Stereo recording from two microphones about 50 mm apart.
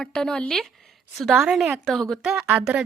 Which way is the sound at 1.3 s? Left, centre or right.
Centre.